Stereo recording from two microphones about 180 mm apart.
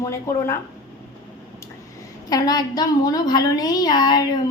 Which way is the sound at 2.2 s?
20° left (ahead or behind).